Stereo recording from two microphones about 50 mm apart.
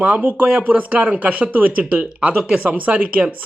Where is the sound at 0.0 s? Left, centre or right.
Right.